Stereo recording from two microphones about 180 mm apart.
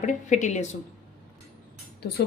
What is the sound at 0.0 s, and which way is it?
Speech, 45° left (ahead or behind).